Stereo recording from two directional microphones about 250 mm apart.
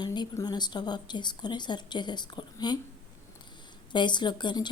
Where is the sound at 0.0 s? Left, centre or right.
Centre.